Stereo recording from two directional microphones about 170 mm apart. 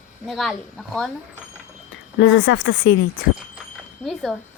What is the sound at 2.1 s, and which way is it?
Speech, 90° left.